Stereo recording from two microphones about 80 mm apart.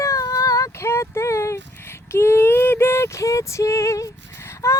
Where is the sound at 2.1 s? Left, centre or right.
Left.